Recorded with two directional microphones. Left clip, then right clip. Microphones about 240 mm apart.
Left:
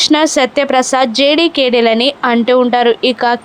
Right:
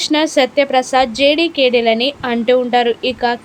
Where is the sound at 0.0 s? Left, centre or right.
Centre.